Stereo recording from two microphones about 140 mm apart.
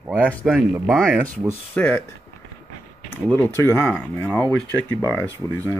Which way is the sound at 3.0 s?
10° left (ahead or behind).